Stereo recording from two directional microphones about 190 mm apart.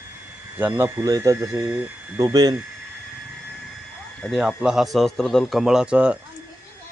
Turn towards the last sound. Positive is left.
turn(degrees=-5)  # may be behind; listen again after turning